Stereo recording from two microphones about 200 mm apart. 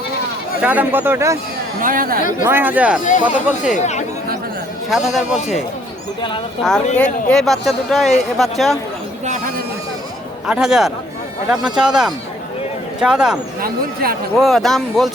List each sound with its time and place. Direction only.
0.6 s speech: 10° right (ahead or behind)
1.8 s speech: 45° right (ahead or behind)
2.4 s speech: 10° right (ahead or behind)
3.1 s speech: 40° left (ahead or behind)
4.9 s speech: centre (ahead or behind)
6.6 s speech: centre (ahead or behind)
9.2 s speech: 40° right (ahead or behind)
10.4 s speech: 5° right (ahead or behind)
13.6 s speech: 50° right (ahead or behind)
14.3 s speech: centre (ahead or behind)